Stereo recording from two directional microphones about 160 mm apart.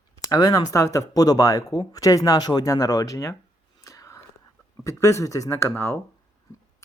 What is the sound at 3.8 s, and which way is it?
Whispering, 20° left (ahead or behind).